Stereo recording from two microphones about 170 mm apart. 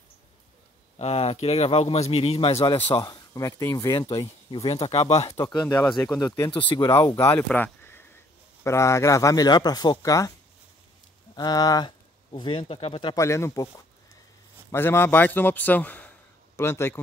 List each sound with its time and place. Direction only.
0.9 s speech: 35° left (ahead or behind)
5.4 s a man's voice: 25° left (ahead or behind)
11.3 s speech: 25° left (ahead or behind)
13.1 s a man's voice: 15° left (ahead or behind)